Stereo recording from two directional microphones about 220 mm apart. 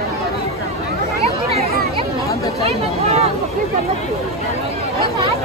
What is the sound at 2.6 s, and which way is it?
Speech, 30° right (ahead or behind).